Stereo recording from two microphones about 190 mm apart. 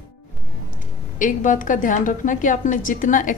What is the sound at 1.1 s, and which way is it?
A woman's voice, 40° left (ahead or behind).